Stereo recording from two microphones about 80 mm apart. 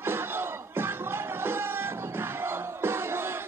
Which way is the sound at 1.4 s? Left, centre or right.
Right.